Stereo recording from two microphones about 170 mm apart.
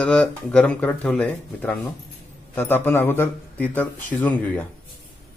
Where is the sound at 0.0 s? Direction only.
5° left (ahead or behind).